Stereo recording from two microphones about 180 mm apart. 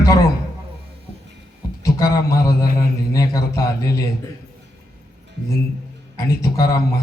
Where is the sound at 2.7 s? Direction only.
20° left (ahead or behind).